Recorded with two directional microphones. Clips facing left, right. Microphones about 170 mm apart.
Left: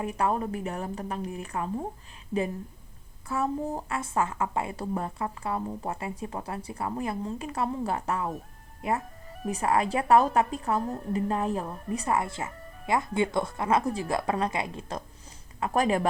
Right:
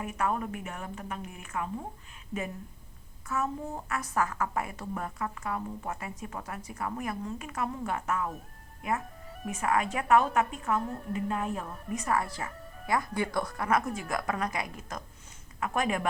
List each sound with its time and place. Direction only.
0.0 s a woman's voice: 30° left (ahead or behind)
3.2 s a woman's voice: 30° left (ahead or behind)